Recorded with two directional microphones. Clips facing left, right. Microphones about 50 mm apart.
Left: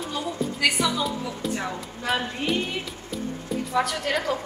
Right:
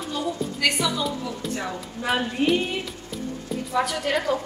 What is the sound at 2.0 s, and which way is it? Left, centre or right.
A woman's voice, centre.